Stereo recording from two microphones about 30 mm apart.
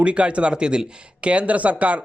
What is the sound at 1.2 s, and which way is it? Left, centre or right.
Speech, right.